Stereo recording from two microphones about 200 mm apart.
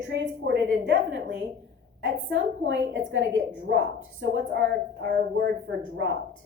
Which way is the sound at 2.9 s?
65° right (ahead or behind).